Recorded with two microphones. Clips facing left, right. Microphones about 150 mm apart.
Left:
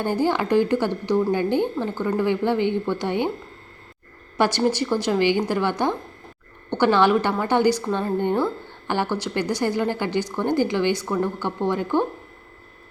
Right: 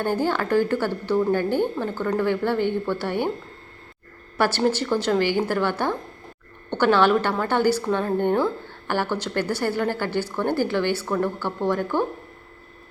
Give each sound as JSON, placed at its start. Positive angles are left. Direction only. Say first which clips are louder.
{"t": 0.0, "sound": "a woman's voice", "louder": "left 1 dB", "side_deg": 15}
{"t": 4.4, "sound": "a woman's voice", "louder": "left 1 dB", "side_deg": 15}